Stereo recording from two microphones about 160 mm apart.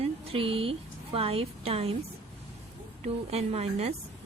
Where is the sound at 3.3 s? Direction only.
40° right (ahead or behind).